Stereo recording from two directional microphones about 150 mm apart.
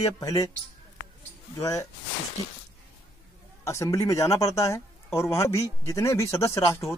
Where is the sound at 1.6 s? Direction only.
20° left (ahead or behind).